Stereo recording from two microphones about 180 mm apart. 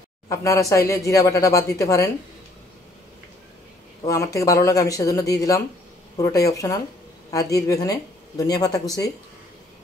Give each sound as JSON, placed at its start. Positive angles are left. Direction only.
{"t": 0.3, "sound": "speech", "side_deg": 15}
{"t": 4.0, "sound": "speech", "side_deg": 20}